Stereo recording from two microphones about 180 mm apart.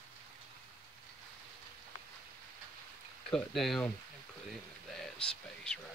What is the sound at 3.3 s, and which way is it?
Speech, centre (ahead or behind).